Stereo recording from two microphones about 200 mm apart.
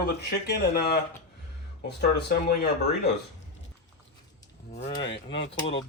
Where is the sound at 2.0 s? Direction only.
55° left (ahead or behind).